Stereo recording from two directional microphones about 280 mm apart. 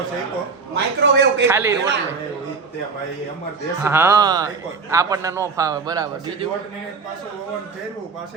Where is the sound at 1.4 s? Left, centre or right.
Centre.